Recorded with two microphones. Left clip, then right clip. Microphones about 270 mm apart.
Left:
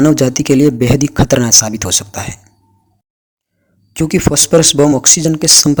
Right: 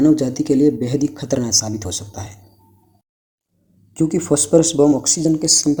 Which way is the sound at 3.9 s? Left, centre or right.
Left.